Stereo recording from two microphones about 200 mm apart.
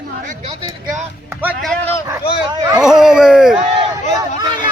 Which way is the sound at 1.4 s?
10° right (ahead or behind).